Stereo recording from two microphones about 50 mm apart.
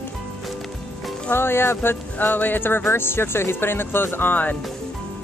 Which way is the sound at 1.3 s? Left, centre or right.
Left.